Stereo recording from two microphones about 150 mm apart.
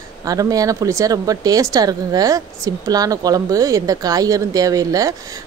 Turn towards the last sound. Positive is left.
turn(degrees=-25)  # may be behind; listen again after turning